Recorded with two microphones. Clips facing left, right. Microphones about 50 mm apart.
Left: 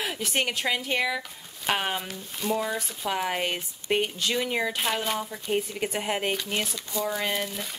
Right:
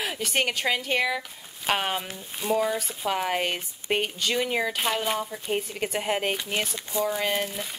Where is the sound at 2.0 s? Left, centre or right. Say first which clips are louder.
Left 1 dB; centre.